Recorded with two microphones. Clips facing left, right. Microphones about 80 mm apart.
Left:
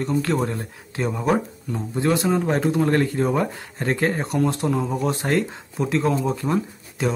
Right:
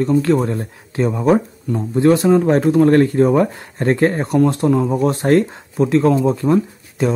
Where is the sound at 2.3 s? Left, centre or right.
Centre.